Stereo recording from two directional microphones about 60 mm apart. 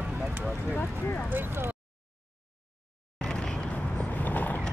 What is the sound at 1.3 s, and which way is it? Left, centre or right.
Speech, right.